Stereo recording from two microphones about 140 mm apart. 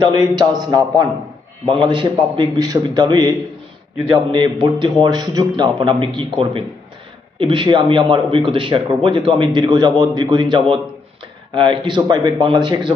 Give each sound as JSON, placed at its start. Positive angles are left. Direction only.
{"t": 0.0, "sound": "a man's voice", "side_deg": -30}